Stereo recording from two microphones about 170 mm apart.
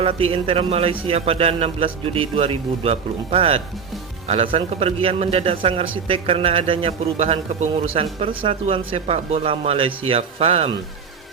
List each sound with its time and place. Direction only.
0.0 s a man's voice: 35° right (ahead or behind)